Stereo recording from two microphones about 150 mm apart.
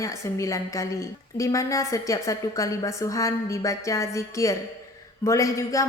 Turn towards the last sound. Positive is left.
turn(degrees=20)  # may be behind; listen again after turning